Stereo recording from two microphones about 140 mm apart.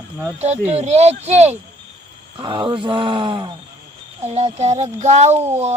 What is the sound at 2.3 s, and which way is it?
Speech, 35° right (ahead or behind).